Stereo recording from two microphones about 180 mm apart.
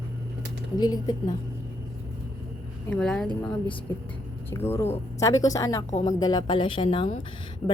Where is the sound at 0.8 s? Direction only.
20° left (ahead or behind).